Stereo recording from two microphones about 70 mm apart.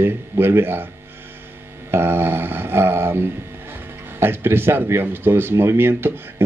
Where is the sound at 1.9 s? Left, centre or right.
Right.